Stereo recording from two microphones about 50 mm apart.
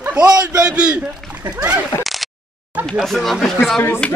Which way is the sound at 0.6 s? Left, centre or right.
Right.